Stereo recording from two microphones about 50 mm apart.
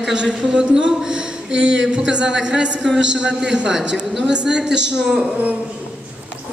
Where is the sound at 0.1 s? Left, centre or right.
Centre.